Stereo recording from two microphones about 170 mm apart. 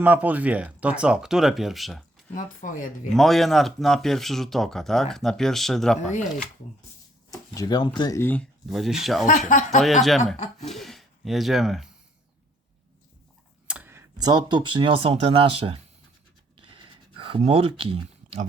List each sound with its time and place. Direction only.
0.0 s speech: 10° right (ahead or behind)
2.3 s speech: 50° left (ahead or behind)
3.1 s speech: centre (ahead or behind)
6.0 s speech: 40° left (ahead or behind)
7.5 s speech: 25° left (ahead or behind)
8.6 s speech: centre (ahead or behind)
9.5 s speech: 45° left (ahead or behind)
9.8 s speech: centre (ahead or behind)
10.3 s speech: 40° left (ahead or behind)
10.7 s speech: centre (ahead or behind)
13.7 s tick: 10° right (ahead or behind)
14.2 s speech: 25° right (ahead or behind)
16.6 s a sound: 30° right (ahead or behind)